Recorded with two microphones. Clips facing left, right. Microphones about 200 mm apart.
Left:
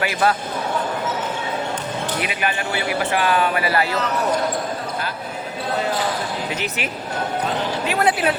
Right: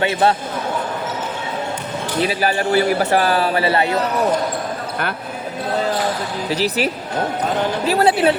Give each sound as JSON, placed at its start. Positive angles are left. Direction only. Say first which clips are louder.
{"t": 0.0, "sound": "speech", "louder": "right 3 dB", "side_deg": -25}
{"t": 2.2, "sound": "a man's voice", "louder": "right 6 dB", "side_deg": -35}
{"t": 6.5, "sound": "a man's voice", "louder": "right 7 dB", "side_deg": -35}